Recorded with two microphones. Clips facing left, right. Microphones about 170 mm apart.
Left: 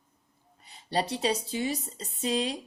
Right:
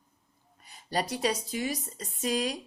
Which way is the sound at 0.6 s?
25° left (ahead or behind).